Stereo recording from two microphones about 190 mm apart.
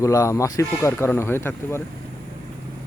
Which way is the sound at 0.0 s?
15° left (ahead or behind).